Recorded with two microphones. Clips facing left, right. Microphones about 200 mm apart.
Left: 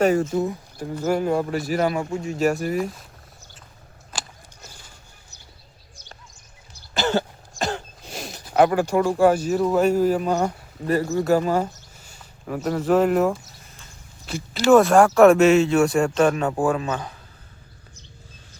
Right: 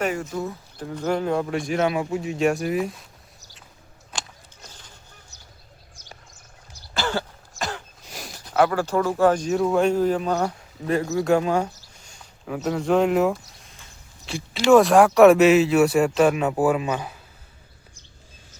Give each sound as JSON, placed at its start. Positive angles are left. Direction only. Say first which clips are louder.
{"t": 0.0, "sound": "speech", "louder": "left 7 dB", "side_deg": 35}
{"t": 0.3, "sound": "speech", "louder": "left 5 dB", "side_deg": 15}
{"t": 0.9, "sound": "speech", "louder": "left 2 dB", "side_deg": 5}
{"t": 4.1, "sound": "a sound", "louder": "even", "side_deg": 5}
{"t": 6.9, "sound": "throat clearing", "louder": "left 4 dB", "side_deg": 20}
{"t": 7.6, "sound": "a sound", "louder": "left 4 dB", "side_deg": 25}
{"t": 8.5, "sound": "speech", "louder": "left 2 dB", "side_deg": 15}